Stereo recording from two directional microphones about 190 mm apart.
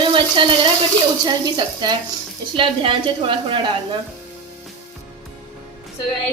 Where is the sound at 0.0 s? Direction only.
25° right (ahead or behind).